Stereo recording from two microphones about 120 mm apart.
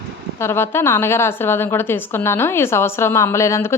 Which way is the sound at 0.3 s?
20° left (ahead or behind).